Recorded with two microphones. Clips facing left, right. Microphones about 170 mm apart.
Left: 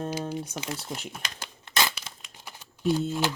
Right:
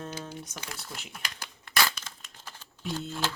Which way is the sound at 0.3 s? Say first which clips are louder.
Left 8 dB; 20° left (ahead or behind).